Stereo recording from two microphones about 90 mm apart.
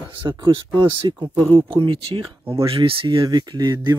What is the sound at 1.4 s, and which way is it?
Speech, 80° right.